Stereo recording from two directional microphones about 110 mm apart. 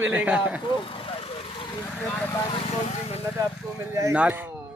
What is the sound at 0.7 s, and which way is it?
Speech, 55° left (ahead or behind).